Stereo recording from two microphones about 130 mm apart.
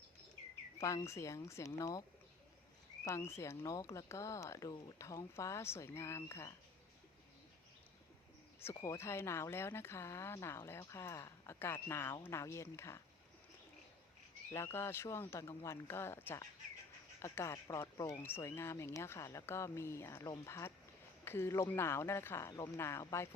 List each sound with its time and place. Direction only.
0.8 s speech: 25° left (ahead or behind)
8.7 s speech: 25° left (ahead or behind)
14.5 s speech: 20° left (ahead or behind)